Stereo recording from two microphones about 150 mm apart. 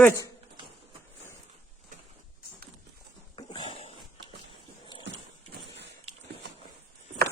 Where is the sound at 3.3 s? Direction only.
30° left (ahead or behind).